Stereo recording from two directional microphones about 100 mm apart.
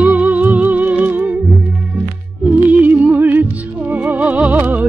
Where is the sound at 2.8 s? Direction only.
15° right (ahead or behind).